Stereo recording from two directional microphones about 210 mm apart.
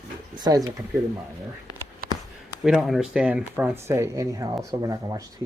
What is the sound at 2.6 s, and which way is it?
Speech, centre (ahead or behind).